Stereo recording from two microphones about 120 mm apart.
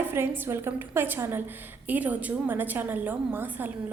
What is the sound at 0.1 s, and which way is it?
A woman's voice, 20° right (ahead or behind).